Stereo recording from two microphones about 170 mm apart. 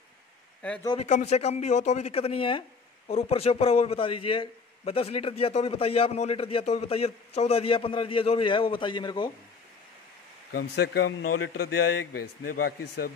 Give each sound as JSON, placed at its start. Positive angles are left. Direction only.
{"t": 0.9, "sound": "a man's voice", "side_deg": 40}
{"t": 10.5, "sound": "a man's voice", "side_deg": 70}